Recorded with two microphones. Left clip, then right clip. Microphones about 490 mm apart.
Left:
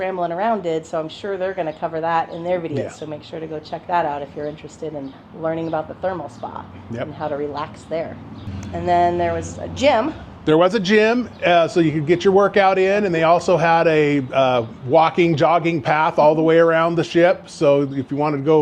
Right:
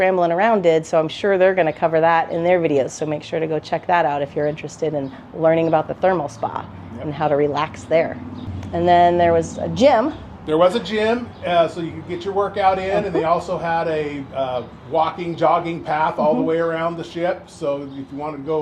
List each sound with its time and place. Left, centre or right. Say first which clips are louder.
0.0 s speech: right 5 dB; right
10.4 s a man's voice: left 1 dB; left